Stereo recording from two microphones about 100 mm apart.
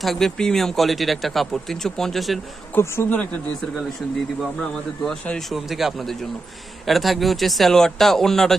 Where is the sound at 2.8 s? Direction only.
20° left (ahead or behind).